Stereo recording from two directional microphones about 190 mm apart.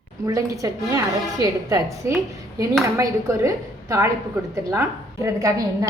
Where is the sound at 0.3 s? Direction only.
15° right (ahead or behind).